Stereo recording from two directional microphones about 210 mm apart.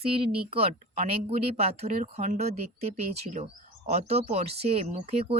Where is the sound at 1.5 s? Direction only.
30° right (ahead or behind).